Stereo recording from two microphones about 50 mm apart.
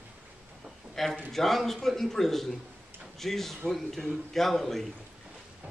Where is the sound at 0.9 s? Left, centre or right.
Centre.